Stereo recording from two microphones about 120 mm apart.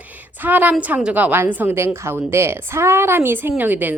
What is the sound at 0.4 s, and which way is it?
A woman's voice, 15° right (ahead or behind).